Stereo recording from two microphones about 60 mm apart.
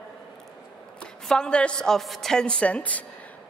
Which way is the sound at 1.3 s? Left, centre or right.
Centre.